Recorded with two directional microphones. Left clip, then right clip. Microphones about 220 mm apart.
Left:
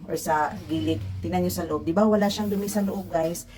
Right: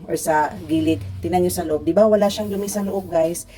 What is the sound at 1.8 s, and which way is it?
A woman's voice, 10° right (ahead or behind).